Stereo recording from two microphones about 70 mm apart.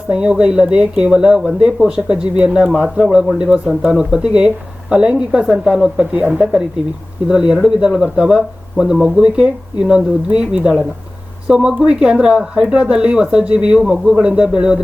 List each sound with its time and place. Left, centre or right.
0.1 s speech: centre
6.1 s speech: centre